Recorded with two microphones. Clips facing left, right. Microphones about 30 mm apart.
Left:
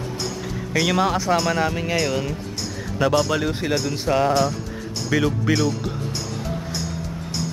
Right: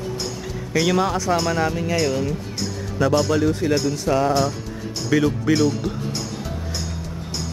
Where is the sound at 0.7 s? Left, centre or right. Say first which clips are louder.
Even; centre.